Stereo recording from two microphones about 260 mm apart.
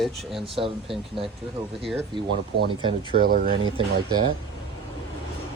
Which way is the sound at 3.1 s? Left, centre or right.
Right.